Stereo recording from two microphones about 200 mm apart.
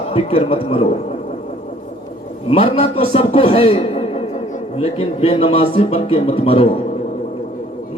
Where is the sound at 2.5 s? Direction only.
30° left (ahead or behind).